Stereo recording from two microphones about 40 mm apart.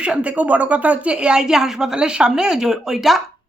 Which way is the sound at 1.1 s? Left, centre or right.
Right.